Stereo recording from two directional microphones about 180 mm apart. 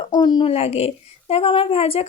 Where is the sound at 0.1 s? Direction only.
25° left (ahead or behind).